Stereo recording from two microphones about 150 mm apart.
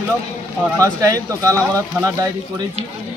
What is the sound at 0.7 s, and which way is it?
Speech, 20° right (ahead or behind).